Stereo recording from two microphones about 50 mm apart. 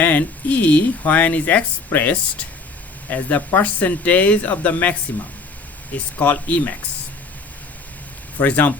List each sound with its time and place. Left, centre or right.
0.0 s speech: left
6.1 s speech: left
8.4 s speech: left